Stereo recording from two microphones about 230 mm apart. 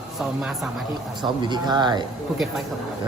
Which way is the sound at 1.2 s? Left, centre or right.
Centre.